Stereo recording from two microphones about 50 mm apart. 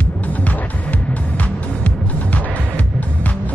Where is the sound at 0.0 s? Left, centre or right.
Left.